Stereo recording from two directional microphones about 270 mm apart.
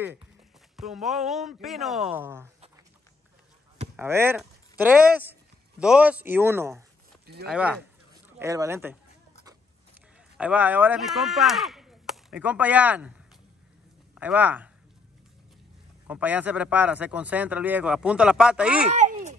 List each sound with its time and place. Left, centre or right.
0.7 s a man's voice: centre
3.9 s a man's voice: centre
8.1 s a sound: centre
10.3 s speech: centre
14.1 s a man's voice: centre
16.1 s a man's voice: centre
18.9 s a sound: right